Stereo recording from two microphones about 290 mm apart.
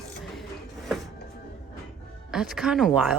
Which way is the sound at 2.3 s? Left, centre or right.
Centre.